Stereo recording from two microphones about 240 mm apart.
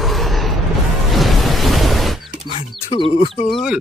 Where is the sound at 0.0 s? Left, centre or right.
Centre.